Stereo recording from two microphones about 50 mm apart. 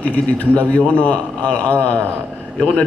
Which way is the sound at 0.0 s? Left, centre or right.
Left.